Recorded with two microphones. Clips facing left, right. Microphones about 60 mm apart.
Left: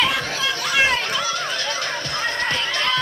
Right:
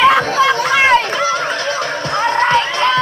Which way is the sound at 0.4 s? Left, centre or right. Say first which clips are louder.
Right 8 dB; right.